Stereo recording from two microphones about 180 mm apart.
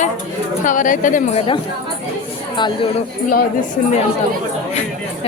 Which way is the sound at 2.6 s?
25° left (ahead or behind).